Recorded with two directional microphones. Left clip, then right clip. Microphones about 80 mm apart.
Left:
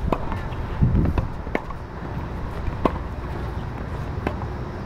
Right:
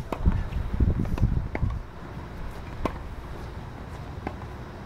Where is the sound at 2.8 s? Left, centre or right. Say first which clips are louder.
Left 8 dB; centre.